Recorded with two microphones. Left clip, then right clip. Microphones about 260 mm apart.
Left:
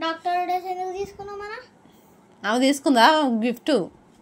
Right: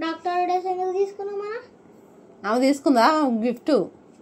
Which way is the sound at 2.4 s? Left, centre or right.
Left.